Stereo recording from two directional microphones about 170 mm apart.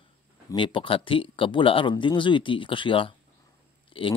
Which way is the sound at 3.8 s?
30° left (ahead or behind).